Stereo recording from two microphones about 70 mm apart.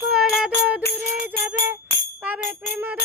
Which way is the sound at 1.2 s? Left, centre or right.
Right.